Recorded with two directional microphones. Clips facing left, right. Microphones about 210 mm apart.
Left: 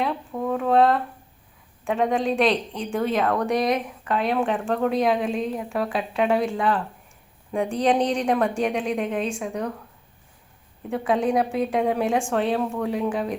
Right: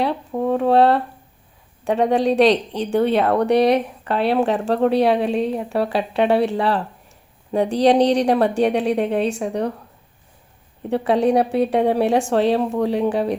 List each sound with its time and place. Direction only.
0.0 s a woman's voice: 35° right (ahead or behind)
10.8 s a woman's voice: 35° right (ahead or behind)